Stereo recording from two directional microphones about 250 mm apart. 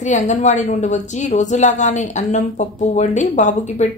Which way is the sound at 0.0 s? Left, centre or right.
Left.